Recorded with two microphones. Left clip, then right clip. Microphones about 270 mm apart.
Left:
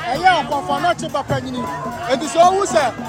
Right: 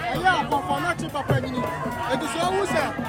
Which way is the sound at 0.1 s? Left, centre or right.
Centre.